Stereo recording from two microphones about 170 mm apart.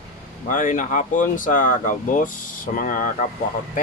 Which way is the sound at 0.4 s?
50° left (ahead or behind).